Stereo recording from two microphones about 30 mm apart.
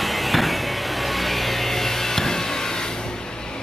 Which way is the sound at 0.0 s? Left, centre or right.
Centre.